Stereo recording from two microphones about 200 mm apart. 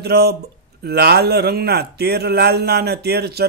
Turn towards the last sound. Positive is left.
turn(degrees=-55)  # may be behind; listen again after turning